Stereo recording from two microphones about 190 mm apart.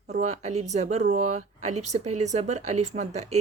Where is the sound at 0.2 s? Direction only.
35° right (ahead or behind).